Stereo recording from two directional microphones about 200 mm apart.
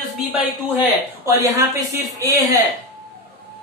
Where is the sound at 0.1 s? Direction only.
Centre (ahead or behind).